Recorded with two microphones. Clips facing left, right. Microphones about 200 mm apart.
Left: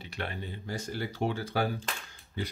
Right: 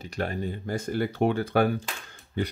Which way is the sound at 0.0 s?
45° right (ahead or behind).